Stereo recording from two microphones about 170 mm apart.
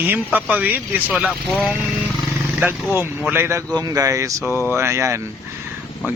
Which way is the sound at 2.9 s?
15° right (ahead or behind).